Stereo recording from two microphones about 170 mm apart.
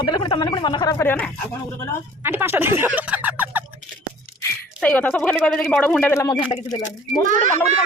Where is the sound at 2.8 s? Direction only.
10° right (ahead or behind).